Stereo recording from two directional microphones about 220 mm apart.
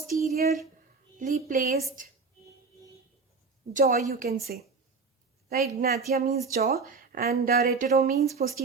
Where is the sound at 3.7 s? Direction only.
35° right (ahead or behind).